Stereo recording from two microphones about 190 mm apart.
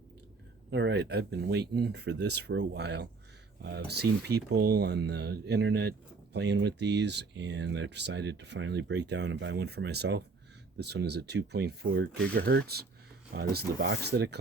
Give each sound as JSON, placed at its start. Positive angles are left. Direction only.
{"t": 0.7, "sound": "speech", "side_deg": -65}